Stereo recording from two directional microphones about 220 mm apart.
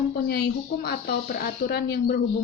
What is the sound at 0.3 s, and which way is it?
Speech, 45° left (ahead or behind).